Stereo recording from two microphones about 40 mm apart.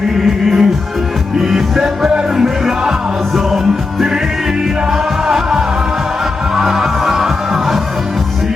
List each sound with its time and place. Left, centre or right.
0.2 s music: centre
5.3 s music: centre